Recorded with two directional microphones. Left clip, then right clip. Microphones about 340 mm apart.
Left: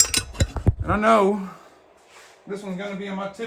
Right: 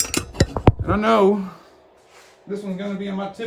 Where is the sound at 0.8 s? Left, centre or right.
Centre.